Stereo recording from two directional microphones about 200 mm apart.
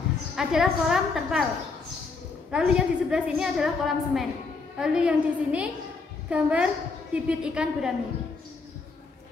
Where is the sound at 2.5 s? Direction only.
5° right (ahead or behind).